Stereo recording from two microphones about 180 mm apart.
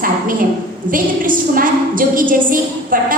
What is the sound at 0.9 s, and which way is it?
A woman's voice, 50° right (ahead or behind).